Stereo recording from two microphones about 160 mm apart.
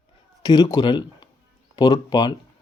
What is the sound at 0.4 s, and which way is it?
Speech, 25° left (ahead or behind).